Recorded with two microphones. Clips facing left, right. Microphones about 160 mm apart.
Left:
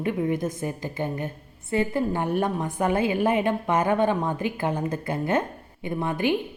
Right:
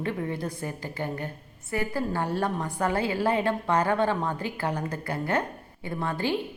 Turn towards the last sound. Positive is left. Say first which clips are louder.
# left 4 dB
turn(degrees=20)  # may be behind; listen again after turning